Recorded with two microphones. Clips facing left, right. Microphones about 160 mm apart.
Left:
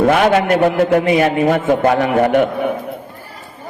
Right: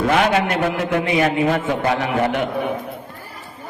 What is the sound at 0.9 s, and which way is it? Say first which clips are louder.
A man's voice: left 5 dB; 40° left (ahead or behind).